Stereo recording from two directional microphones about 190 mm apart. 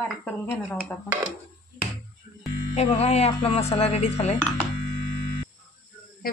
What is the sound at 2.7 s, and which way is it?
Speech, 35° left (ahead or behind).